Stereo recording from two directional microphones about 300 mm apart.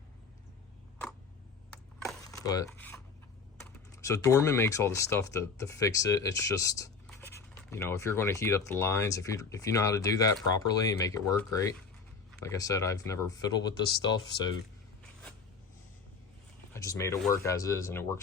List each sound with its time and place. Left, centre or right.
2.0 s a sound: centre
2.6 s speech: centre
16.7 s speech: centre